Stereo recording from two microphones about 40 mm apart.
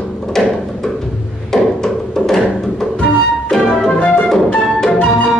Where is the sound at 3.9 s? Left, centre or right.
Left.